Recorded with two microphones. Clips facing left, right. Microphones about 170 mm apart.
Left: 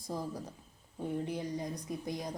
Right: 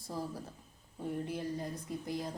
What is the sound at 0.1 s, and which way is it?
A woman's voice, 15° left (ahead or behind).